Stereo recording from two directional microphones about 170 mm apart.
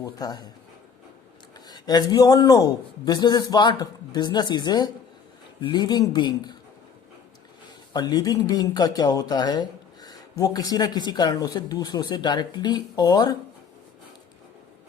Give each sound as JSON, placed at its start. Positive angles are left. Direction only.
{"t": 0.0, "sound": "speech", "side_deg": 25}
{"t": 1.6, "sound": "speech", "side_deg": 25}
{"t": 7.9, "sound": "speech", "side_deg": 25}